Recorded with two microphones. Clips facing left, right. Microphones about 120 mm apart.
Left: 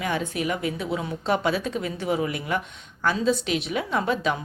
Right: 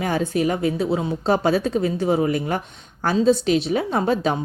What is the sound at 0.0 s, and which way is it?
A woman's voice, 35° right (ahead or behind).